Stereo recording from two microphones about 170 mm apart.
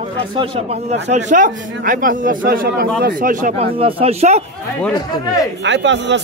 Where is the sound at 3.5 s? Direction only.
35° right (ahead or behind).